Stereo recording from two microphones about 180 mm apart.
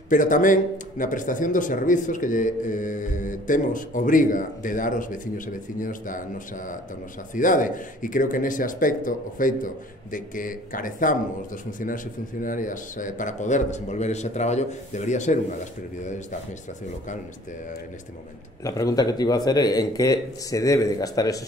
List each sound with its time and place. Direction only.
0.1 s speech: 45° left (ahead or behind)
18.6 s speech: 20° left (ahead or behind)